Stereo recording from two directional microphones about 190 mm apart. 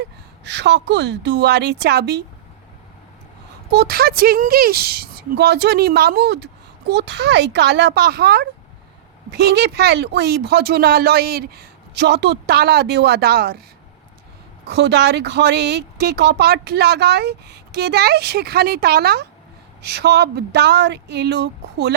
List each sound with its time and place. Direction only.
0.0 s a woman's voice: 65° right (ahead or behind)
3.7 s a woman's voice: 55° right (ahead or behind)
14.7 s a woman's voice: 60° right (ahead or behind)